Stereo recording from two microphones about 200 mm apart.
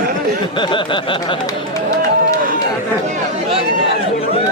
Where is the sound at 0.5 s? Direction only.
25° left (ahead or behind).